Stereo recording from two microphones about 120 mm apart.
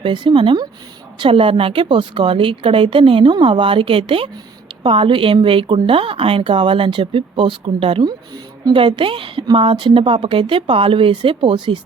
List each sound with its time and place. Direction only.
0.0 s speech: 45° right (ahead or behind)